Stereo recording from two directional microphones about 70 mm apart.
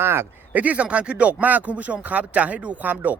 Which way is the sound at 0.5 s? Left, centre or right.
Right.